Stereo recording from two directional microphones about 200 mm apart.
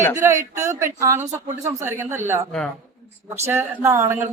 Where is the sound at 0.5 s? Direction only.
15° right (ahead or behind).